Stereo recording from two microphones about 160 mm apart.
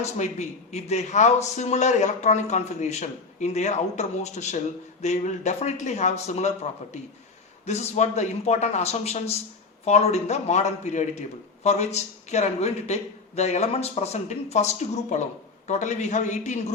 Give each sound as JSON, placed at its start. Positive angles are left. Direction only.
{"t": 0.0, "sound": "a man's voice", "side_deg": 45}
{"t": 7.6, "sound": "a man's voice", "side_deg": 45}